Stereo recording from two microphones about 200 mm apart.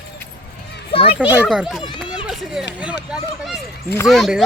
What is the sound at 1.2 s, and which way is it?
Speech, 10° right (ahead or behind).